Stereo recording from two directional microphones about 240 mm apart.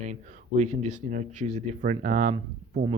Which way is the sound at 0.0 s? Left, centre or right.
Right.